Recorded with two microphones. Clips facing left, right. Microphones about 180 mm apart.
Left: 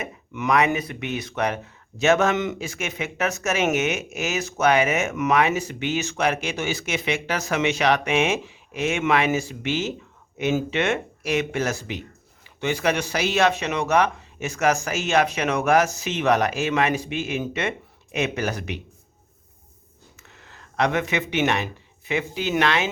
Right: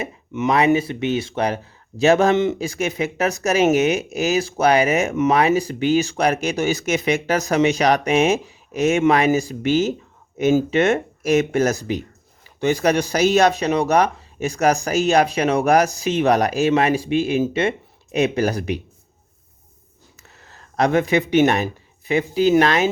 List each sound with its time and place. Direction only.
0.0 s speech: 25° right (ahead or behind)
20.4 s speech: 40° right (ahead or behind)